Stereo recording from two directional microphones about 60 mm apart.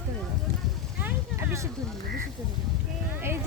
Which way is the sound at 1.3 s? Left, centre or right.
Right.